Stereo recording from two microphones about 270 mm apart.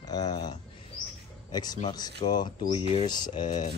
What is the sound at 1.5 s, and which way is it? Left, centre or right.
Speech, centre.